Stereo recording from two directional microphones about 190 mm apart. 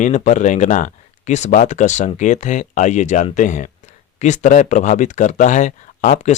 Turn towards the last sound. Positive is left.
turn(degrees=40)  # may be behind; listen again after turning